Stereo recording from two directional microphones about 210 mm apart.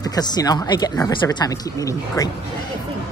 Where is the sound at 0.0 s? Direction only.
20° left (ahead or behind).